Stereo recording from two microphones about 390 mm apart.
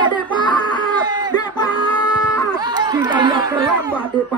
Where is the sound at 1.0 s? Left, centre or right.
Centre.